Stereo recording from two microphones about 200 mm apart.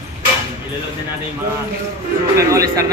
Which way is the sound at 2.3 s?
15° right (ahead or behind).